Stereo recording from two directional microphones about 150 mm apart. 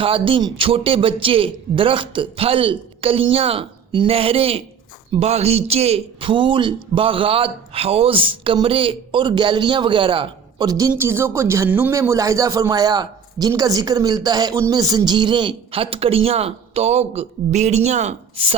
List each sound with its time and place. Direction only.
0.0 s speech: 35° right (ahead or behind)